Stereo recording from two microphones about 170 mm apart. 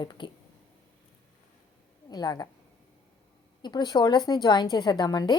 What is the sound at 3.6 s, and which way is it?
A woman's voice, 25° left (ahead or behind).